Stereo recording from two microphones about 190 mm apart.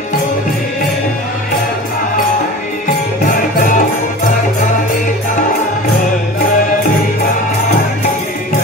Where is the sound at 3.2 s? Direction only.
40° left (ahead or behind).